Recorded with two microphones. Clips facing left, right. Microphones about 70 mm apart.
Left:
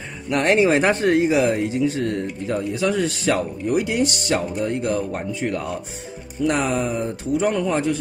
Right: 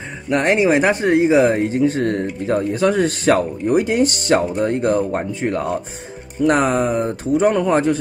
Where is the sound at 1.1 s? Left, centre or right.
Right.